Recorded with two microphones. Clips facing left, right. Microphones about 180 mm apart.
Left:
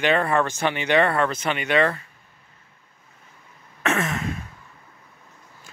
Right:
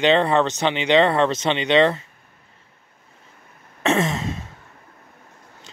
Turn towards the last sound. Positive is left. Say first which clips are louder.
# right 4 dB
turn(degrees=-25)  # may be behind; listen again after turning